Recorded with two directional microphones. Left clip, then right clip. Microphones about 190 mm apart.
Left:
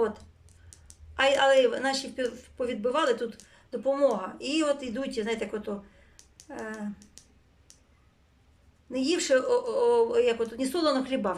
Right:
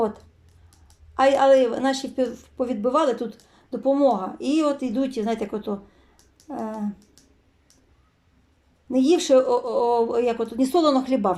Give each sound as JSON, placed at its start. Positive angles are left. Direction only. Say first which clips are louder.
{"t": 1.1, "sound": "a woman's voice", "louder": "right 5 dB", "side_deg": -20}
{"t": 8.9, "sound": "a woman's voice", "louder": "right 7 dB", "side_deg": -20}